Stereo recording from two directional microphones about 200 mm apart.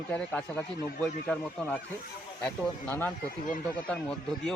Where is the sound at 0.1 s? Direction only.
5° left (ahead or behind).